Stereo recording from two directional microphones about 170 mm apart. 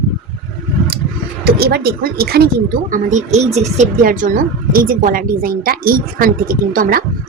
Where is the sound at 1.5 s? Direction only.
70° right (ahead or behind).